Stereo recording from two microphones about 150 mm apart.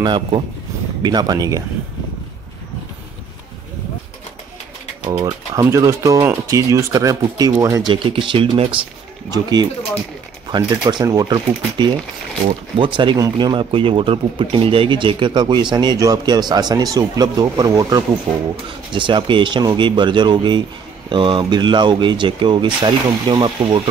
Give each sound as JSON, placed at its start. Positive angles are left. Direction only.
{"t": 0.0, "sound": "speech", "side_deg": -30}
{"t": 5.2, "sound": "speech", "side_deg": -20}
{"t": 7.9, "sound": "speech", "side_deg": -35}